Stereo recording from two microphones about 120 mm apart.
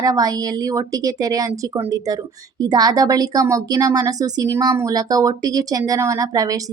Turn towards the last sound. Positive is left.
turn(degrees=-30)  # may be behind; listen again after turning